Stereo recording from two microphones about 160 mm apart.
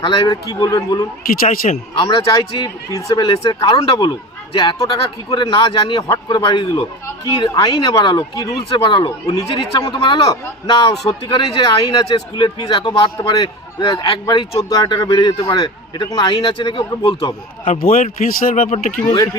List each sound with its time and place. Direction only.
0.0 s a man's voice: 25° left (ahead or behind)
1.3 s speech: 60° left (ahead or behind)
2.0 s a man's voice: 25° left (ahead or behind)
17.7 s speech: 60° left (ahead or behind)